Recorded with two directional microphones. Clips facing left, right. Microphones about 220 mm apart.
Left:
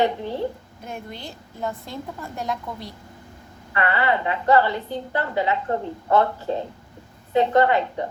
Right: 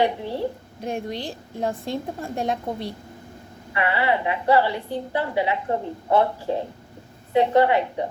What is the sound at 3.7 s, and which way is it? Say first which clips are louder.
A woman's voice: even; 20° right (ahead or behind).